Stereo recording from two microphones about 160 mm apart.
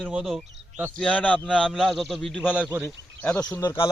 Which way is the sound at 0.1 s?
5° right (ahead or behind).